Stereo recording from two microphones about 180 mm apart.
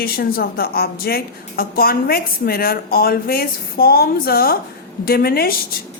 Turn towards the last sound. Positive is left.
turn(degrees=55)  # may be behind; listen again after turning